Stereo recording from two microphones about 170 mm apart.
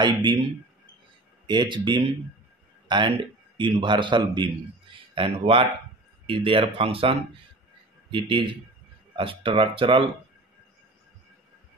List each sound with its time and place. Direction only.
0.0 s a man's voice: 25° right (ahead or behind)
1.5 s a man's voice: 25° right (ahead or behind)